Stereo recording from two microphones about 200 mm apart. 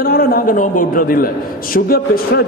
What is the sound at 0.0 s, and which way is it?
A man's voice, 45° left (ahead or behind).